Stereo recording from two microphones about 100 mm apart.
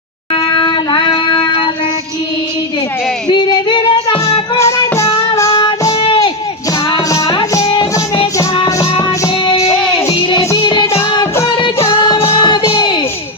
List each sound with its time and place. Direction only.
0.3 s child singing: 50° left (ahead or behind)
3.2 s female singing: 50° left (ahead or behind)
4.5 s music: 30° left (ahead or behind)
8.8 s music: 30° left (ahead or behind)
10.6 s music: 50° left (ahead or behind)